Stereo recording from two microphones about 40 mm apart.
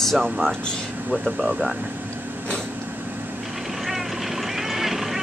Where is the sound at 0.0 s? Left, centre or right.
Centre.